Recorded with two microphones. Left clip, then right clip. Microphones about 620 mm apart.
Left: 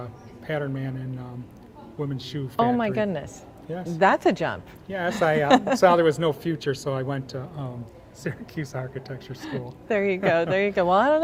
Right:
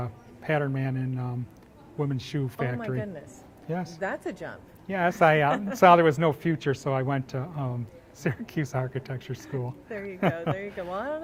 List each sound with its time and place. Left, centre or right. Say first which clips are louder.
0.0 s a man's voice: right 1 dB; right
2.8 s speech: left 9 dB; left
3.7 s speech: left 1 dB; right
4.0 s speech: left 17 dB; left
4.9 s speech: right 2 dB; right
5.5 s speech: left 8 dB; left
5.8 s speech: even; right
9.9 s speech: left 9 dB; left